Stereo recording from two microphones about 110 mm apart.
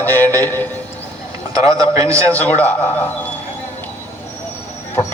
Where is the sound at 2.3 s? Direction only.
15° left (ahead or behind).